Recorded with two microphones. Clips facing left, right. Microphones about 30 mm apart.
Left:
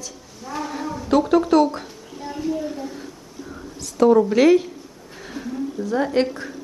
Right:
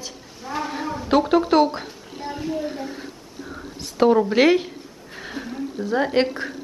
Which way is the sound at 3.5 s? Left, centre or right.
Right.